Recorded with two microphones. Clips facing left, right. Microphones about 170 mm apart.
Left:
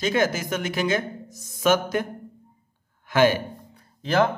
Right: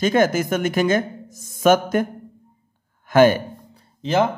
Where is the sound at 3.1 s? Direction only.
50° right (ahead or behind).